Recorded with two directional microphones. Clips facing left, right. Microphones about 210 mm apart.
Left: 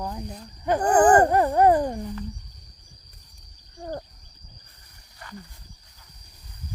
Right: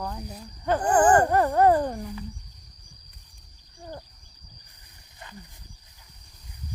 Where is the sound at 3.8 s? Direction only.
60° left (ahead or behind).